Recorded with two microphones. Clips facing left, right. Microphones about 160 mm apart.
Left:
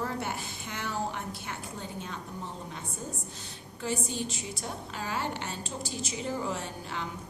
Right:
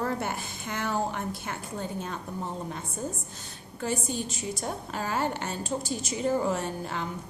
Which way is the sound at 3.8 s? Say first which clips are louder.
Right 2 dB; 50° right (ahead or behind).